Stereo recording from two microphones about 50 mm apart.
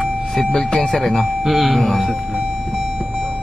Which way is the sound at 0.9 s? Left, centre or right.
Centre.